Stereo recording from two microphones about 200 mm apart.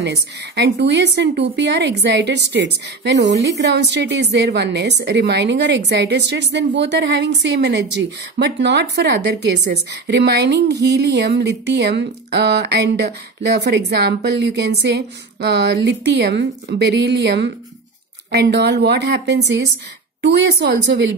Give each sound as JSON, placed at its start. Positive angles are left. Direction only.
{"t": 0.0, "sound": "a woman's voice", "side_deg": -60}